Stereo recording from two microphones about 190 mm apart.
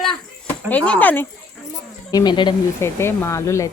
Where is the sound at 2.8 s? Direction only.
10° left (ahead or behind).